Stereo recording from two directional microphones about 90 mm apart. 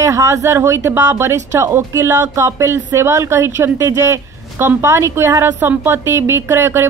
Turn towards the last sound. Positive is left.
turn(degrees=-30)  # may be behind; listen again after turning